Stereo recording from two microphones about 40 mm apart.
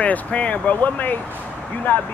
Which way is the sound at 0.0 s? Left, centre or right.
Left.